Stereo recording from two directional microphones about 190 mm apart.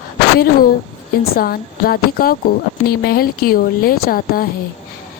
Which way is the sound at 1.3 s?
50° left (ahead or behind).